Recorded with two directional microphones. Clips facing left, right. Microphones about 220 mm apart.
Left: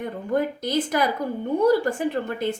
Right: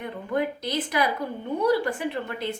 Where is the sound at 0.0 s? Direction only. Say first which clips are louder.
Left 3 dB; 45° left (ahead or behind).